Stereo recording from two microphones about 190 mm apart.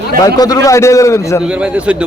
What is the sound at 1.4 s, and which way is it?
Speech, 5° right (ahead or behind).